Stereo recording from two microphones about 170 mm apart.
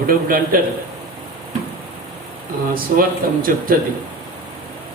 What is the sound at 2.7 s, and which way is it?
A man's voice, 55° right (ahead or behind).